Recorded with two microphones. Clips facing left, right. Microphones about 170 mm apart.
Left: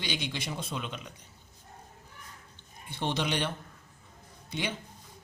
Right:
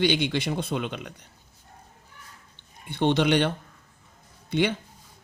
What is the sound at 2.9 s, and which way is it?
Speech, 65° right (ahead or behind).